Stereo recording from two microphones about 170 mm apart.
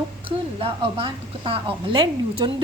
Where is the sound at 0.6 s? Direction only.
35° right (ahead or behind).